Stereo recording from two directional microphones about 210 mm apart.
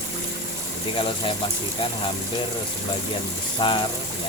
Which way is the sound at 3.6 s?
25° left (ahead or behind).